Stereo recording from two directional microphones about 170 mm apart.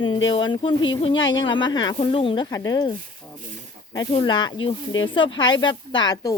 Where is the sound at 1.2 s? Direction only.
90° left.